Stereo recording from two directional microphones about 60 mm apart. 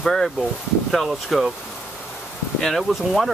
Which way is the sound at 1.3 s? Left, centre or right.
Centre.